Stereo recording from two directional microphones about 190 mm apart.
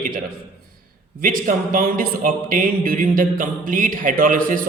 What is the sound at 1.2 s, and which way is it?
A man's voice, 45° right (ahead or behind).